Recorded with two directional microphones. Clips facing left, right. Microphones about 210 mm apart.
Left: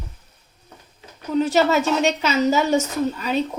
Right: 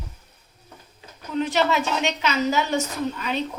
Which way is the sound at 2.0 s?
40° left (ahead or behind).